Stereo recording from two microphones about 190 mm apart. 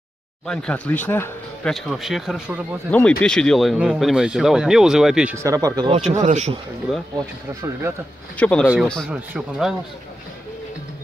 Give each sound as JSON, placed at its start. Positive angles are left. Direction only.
{"t": 0.5, "sound": "speech", "side_deg": 5}
{"t": 1.7, "sound": "speech", "side_deg": 0}
{"t": 2.9, "sound": "speech", "side_deg": 5}
{"t": 5.9, "sound": "speech", "side_deg": -40}
{"t": 6.9, "sound": "speech", "side_deg": 0}
{"t": 8.4, "sound": "speech", "side_deg": 5}